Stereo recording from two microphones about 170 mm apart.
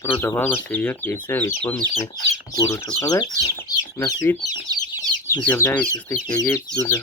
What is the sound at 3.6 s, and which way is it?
Chicken, 20° left (ahead or behind).